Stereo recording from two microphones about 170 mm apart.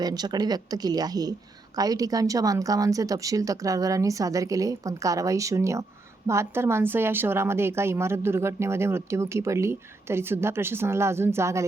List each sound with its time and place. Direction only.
0.0 s a woman's voice: 25° right (ahead or behind)